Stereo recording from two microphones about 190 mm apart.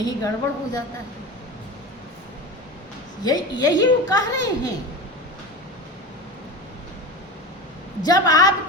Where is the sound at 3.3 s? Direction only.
20° left (ahead or behind).